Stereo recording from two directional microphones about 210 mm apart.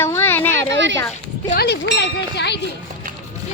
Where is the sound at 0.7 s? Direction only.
60° right (ahead or behind).